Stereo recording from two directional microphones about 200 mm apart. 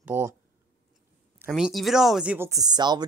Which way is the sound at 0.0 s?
10° right (ahead or behind).